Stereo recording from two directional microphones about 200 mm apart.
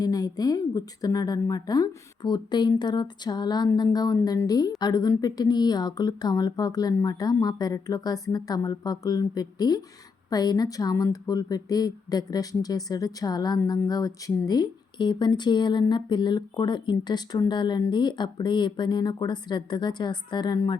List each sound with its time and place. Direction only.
0.0 s a woman's voice: 20° left (ahead or behind)